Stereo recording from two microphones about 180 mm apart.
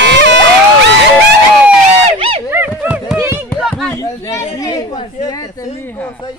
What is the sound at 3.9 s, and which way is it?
Speech, 15° left (ahead or behind).